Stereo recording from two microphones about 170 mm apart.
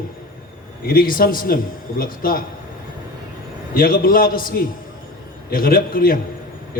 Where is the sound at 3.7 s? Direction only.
60° left (ahead or behind).